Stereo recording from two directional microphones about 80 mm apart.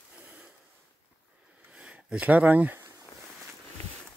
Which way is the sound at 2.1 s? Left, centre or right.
Centre.